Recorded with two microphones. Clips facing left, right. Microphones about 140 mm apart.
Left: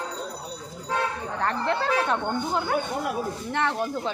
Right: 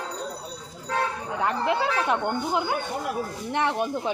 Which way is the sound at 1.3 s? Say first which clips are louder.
Right 2 dB; 10° right (ahead or behind).